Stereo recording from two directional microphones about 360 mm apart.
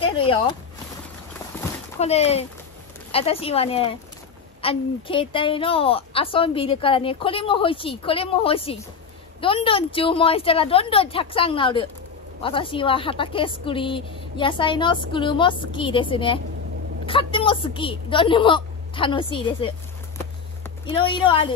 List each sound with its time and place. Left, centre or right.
0.0 s a sound: centre
2.0 s a woman's voice: centre
20.8 s a woman's voice: centre